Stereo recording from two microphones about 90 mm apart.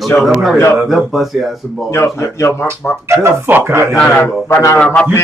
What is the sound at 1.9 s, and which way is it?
Speech, 30° left (ahead or behind).